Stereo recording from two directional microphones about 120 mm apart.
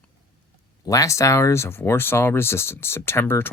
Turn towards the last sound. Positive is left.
turn(degrees=20)  # may be behind; listen again after turning